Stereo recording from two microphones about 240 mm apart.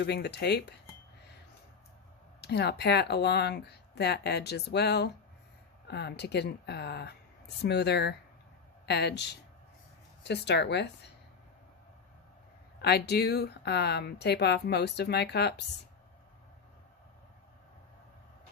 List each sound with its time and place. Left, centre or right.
0.0 s speech: left
2.4 s speech: left
12.8 s speech: left